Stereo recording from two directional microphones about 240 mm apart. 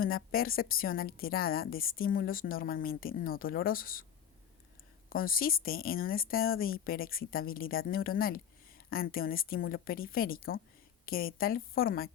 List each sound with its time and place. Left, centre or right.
0.0 s speech: left
5.0 s speech: left